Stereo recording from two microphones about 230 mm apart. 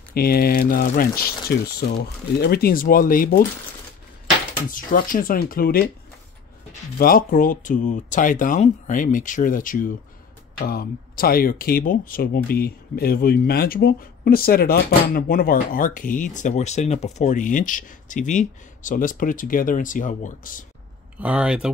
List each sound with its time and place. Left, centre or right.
0.1 s speech: left
2.4 s speech: left
4.6 s speech: left
7.0 s speech: left
21.2 s speech: centre